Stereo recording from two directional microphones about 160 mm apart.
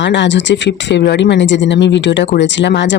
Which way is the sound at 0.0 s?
90° left.